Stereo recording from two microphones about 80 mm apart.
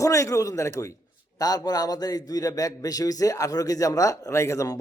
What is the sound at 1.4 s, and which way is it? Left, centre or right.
A man's voice, left.